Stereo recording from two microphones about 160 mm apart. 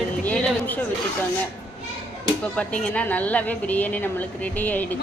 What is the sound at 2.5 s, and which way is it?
A woman's voice, 10° left (ahead or behind).